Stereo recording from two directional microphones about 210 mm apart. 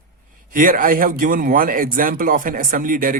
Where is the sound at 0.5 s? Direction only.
40° right (ahead or behind).